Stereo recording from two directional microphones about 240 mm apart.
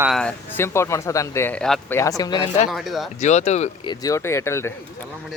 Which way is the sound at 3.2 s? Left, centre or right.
Left.